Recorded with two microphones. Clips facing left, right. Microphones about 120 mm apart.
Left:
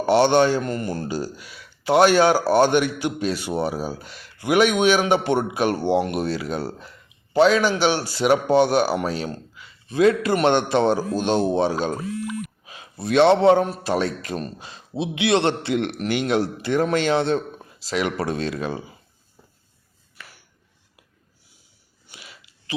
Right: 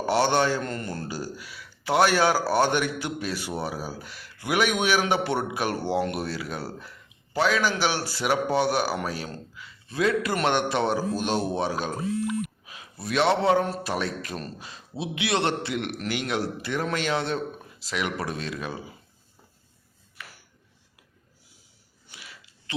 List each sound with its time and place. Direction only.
0.0 s speech: 20° left (ahead or behind)
0.6 s a man's voice: 10° left (ahead or behind); by 18.8 s 30° left (ahead or behind)
22.1 s a sound: 20° left (ahead or behind)